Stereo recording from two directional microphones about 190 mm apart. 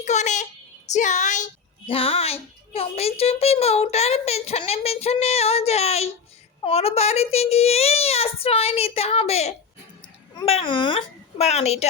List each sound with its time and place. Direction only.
0.0 s a woman's voice: 40° left (ahead or behind)